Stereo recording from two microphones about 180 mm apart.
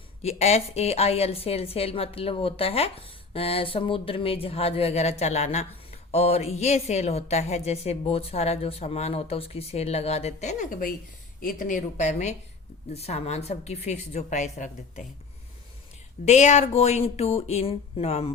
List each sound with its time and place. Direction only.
0.2 s speech: 35° left (ahead or behind)
16.2 s speech: 40° left (ahead or behind)